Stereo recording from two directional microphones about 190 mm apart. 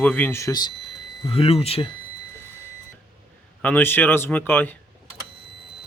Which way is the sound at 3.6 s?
10° left (ahead or behind).